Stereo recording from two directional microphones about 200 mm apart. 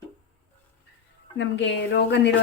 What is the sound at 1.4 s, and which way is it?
Speech, 60° left (ahead or behind).